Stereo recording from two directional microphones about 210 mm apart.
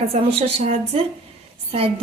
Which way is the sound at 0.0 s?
30° right (ahead or behind).